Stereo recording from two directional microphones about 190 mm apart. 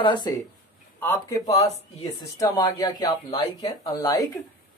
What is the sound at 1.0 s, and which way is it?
Speech, 15° left (ahead or behind).